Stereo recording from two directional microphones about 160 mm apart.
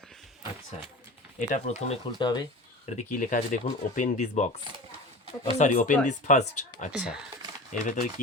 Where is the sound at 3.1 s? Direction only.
55° left (ahead or behind).